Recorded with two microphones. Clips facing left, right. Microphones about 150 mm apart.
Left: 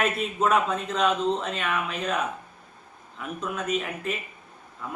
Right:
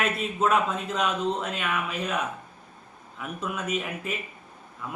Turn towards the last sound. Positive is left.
turn(degrees=-5)  # may be behind; listen again after turning